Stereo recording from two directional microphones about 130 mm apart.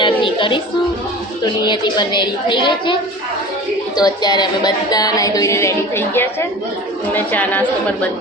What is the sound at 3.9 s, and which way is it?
Music, 30° left (ahead or behind).